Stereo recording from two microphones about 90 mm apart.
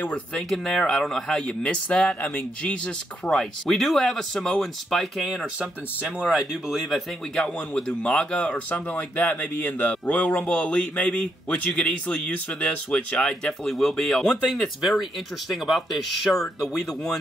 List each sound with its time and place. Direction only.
0.0 s speech: 15° left (ahead or behind)
0.5 s speech: 5° left (ahead or behind); by 2.7 s 20° left (ahead or behind)
3.3 s speech: 5° left (ahead or behind)
5.6 s speech: 15° right (ahead or behind)
6.2 s speech: centre (ahead or behind)